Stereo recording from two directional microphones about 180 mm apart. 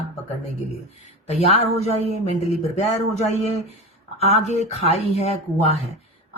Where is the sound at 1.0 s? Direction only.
35° left (ahead or behind).